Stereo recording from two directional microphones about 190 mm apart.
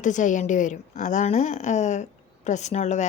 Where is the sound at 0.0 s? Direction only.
40° left (ahead or behind).